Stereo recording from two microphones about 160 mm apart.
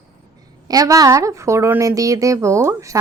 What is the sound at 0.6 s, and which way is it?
Speech, 25° right (ahead or behind).